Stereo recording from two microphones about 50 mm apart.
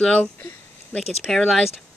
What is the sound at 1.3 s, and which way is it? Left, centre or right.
Speech, centre.